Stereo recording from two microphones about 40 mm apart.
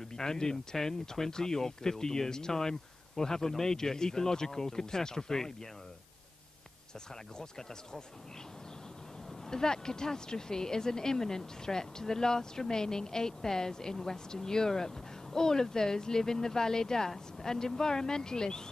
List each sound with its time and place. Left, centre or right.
0.0 s speech: centre
7.3 s speech: centre
9.5 s speech: centre